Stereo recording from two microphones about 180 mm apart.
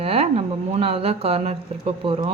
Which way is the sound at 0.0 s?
35° right (ahead or behind).